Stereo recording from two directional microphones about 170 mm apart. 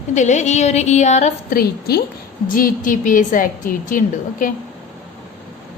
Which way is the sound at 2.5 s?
55° left (ahead or behind).